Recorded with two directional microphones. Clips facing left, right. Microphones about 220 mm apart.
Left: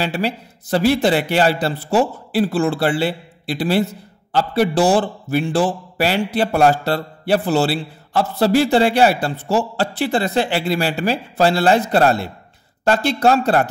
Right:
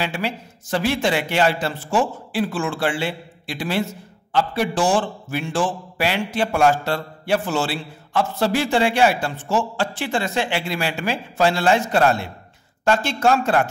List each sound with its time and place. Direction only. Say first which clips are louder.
0.0 s a man's voice: left 4 dB; 35° left (ahead or behind)